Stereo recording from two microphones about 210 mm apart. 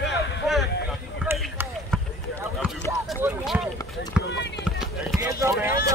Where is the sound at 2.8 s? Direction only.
10° left (ahead or behind).